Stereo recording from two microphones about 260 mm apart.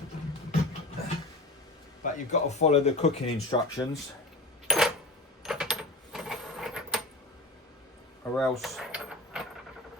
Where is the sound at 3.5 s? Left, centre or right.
Centre.